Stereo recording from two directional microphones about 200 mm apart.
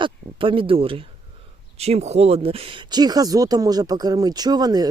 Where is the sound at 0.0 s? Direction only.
25° right (ahead or behind).